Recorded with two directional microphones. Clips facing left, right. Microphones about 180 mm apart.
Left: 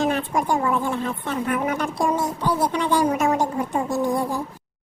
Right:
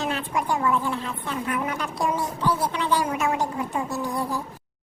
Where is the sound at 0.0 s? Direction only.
45° left (ahead or behind).